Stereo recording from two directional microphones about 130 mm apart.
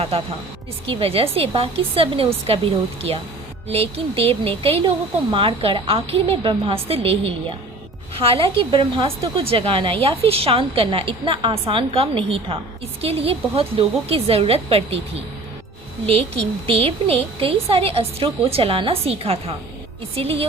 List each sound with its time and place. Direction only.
0.9 s a woman's voice: 45° right (ahead or behind)
16.0 s a woman's voice: 50° right (ahead or behind)